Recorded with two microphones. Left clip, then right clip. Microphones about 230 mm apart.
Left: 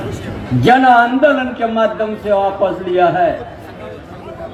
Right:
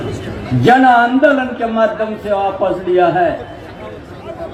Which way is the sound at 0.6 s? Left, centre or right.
Left.